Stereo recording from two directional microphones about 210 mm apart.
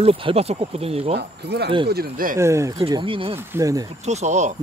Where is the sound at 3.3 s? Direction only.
15° right (ahead or behind).